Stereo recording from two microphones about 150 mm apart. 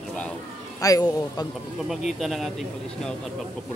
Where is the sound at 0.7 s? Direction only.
25° left (ahead or behind).